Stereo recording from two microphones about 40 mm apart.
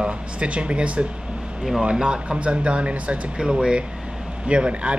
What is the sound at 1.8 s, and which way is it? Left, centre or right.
Speech, right.